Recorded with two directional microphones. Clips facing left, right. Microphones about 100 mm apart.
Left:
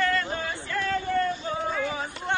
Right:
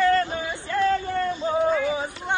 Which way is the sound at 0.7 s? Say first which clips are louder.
Right 9 dB; 25° right (ahead or behind).